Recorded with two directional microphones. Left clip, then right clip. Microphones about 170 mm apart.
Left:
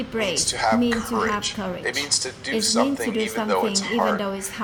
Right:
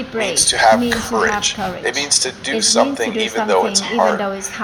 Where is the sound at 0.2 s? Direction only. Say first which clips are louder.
Right 6 dB; 40° left (ahead or behind).